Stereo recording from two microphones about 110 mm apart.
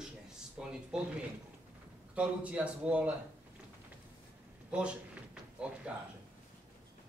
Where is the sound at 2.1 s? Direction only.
10° right (ahead or behind).